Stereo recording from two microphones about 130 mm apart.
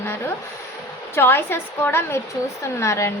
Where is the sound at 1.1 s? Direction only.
15° left (ahead or behind).